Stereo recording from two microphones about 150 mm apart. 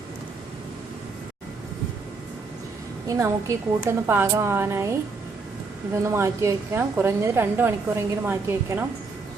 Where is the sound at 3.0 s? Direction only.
20° right (ahead or behind).